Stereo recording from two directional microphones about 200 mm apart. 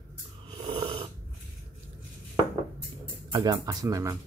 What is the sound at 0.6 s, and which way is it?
Snoring, 25° right (ahead or behind).